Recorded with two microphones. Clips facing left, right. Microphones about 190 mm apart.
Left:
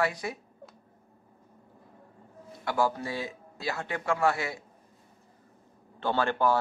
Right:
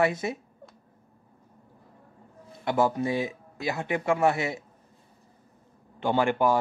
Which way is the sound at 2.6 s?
20° right (ahead or behind).